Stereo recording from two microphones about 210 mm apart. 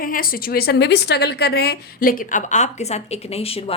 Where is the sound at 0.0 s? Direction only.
40° left (ahead or behind).